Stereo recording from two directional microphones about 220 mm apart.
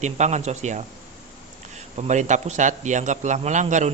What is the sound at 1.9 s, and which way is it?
A man's voice, 35° right (ahead or behind).